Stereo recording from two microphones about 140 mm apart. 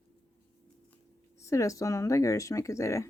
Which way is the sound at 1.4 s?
20° left (ahead or behind).